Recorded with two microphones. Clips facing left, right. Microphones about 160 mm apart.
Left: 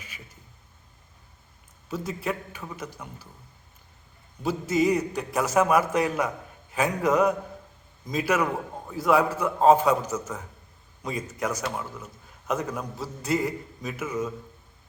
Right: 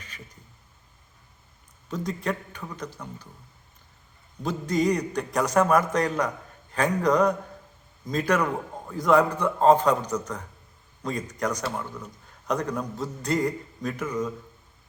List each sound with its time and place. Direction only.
1.9 s a man's voice: 5° left (ahead or behind)
4.4 s a man's voice: 5° left (ahead or behind)